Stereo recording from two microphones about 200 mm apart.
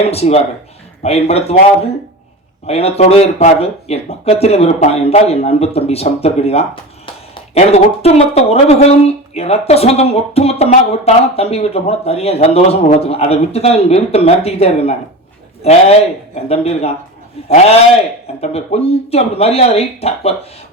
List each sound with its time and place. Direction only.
0.0 s speech: 30° left (ahead or behind)
2.6 s speech: 30° left (ahead or behind)